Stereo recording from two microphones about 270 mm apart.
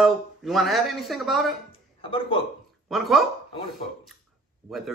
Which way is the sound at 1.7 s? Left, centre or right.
Centre.